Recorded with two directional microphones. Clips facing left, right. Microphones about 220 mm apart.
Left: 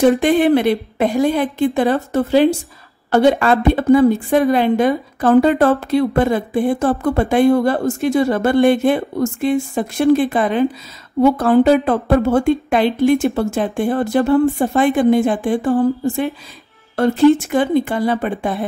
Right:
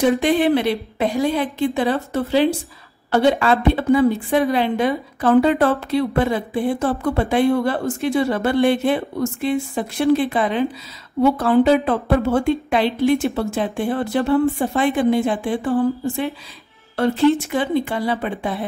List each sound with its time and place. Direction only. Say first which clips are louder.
0.0 s a woman's voice: left 4 dB; 50° left (ahead or behind)
16.9 s a woman's voice: left 4 dB; 45° left (ahead or behind)